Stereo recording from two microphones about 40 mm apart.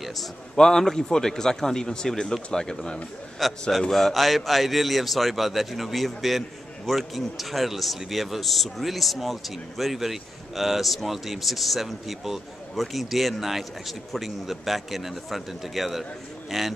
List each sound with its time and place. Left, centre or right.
0.0 s a man's voice: centre
0.6 s a man's voice: centre
3.4 s a man's voice: centre